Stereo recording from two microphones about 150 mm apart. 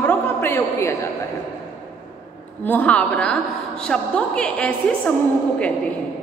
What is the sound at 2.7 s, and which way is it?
A woman's voice, 10° left (ahead or behind).